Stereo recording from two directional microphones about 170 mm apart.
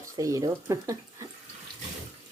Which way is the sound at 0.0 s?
20° right (ahead or behind).